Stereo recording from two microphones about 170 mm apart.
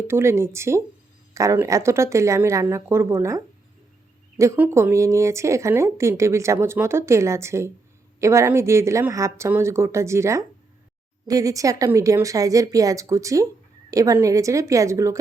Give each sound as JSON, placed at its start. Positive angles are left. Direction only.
{"t": 0.1, "sound": "a woman's voice", "side_deg": -15}